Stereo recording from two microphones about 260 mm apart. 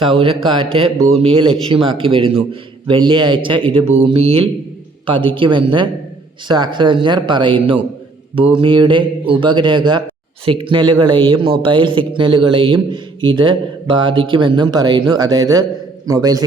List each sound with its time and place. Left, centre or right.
0.0 s speech: right